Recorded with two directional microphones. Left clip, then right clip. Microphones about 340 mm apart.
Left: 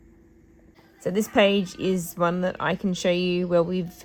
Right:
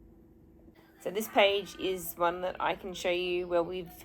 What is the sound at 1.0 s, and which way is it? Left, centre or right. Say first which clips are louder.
A woman's voice: left 5 dB; left.